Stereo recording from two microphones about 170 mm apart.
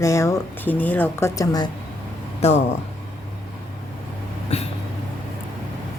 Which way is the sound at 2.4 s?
40° left (ahead or behind).